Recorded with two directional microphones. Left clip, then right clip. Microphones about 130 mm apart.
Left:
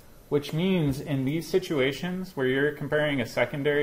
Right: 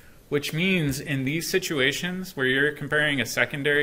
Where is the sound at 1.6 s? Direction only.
45° right (ahead or behind).